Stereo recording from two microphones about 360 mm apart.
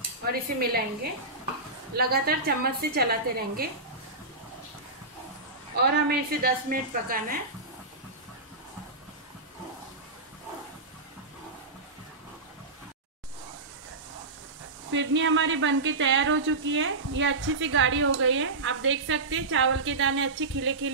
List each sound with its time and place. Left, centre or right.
0.3 s a woman's voice: right
2.0 s a woman's voice: right
5.8 s a woman's voice: right
14.9 s speech: right